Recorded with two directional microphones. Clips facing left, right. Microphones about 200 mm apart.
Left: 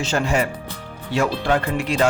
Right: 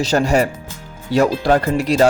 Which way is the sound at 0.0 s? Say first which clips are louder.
Right 5 dB; 40° right (ahead or behind).